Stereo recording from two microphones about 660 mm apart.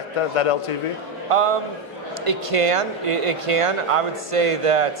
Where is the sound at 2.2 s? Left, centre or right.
Right.